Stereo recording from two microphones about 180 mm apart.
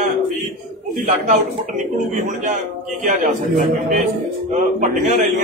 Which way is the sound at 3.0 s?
45° right (ahead or behind).